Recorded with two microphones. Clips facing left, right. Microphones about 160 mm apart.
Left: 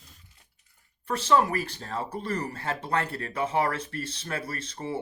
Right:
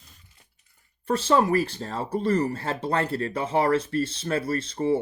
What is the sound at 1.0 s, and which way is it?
Speech, 30° right (ahead or behind).